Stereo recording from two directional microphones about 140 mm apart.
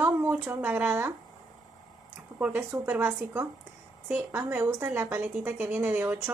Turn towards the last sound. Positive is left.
turn(degrees=-15)  # may be behind; listen again after turning